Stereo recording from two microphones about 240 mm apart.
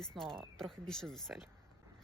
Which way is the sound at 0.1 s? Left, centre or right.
Centre.